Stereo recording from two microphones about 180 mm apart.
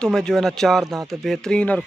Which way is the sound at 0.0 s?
5° left (ahead or behind).